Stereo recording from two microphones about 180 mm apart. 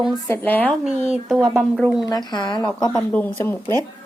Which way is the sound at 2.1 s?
20° left (ahead or behind).